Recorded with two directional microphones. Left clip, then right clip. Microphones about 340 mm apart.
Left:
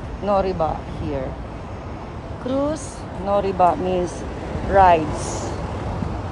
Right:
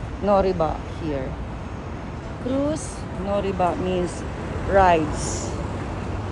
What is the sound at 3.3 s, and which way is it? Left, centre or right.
Speech, centre.